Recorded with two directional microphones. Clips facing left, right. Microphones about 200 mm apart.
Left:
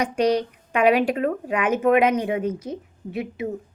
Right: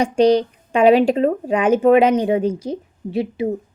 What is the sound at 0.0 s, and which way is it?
A woman's voice, 30° right (ahead or behind).